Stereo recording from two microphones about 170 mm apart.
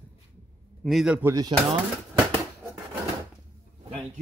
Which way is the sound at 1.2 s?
20° right (ahead or behind).